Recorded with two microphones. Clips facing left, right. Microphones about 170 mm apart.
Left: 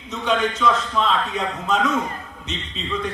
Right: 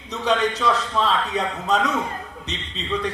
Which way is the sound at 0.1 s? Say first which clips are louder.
Even; 35° right (ahead or behind).